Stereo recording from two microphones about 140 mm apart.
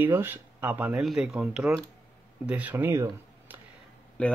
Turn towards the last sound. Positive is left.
turn(degrees=10)  # may be behind; listen again after turning